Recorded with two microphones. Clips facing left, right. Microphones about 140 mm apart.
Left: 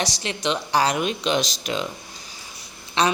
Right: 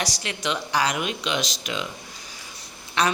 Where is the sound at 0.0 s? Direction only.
25° left (ahead or behind).